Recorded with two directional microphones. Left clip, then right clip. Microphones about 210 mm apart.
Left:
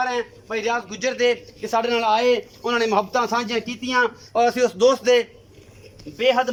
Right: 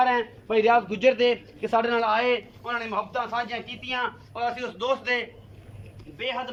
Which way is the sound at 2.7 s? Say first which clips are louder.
Left 9 dB; 45° left (ahead or behind).